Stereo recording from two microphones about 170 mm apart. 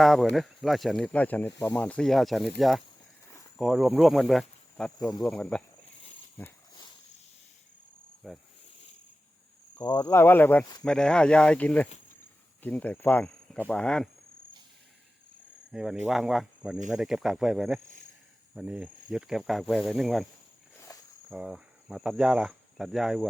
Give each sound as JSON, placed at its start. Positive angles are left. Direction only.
{"t": 0.0, "sound": "speech", "side_deg": 0}
{"t": 8.2, "sound": "speech", "side_deg": 0}
{"t": 9.8, "sound": "speech", "side_deg": 20}
{"t": 15.7, "sound": "speech", "side_deg": -5}
{"t": 20.7, "sound": "cricket", "side_deg": 20}
{"t": 21.2, "sound": "speech", "side_deg": -5}